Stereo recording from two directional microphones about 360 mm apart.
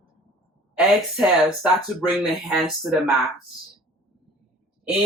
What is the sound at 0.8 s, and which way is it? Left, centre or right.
Speech, centre.